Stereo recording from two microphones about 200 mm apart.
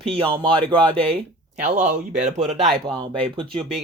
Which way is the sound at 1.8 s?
5° right (ahead or behind).